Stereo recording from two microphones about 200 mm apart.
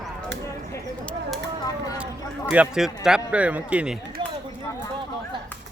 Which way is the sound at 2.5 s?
5° right (ahead or behind).